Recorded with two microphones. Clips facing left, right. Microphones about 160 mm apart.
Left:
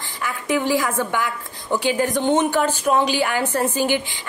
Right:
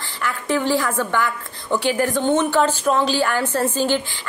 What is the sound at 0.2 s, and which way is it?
A woman's voice, 15° left (ahead or behind).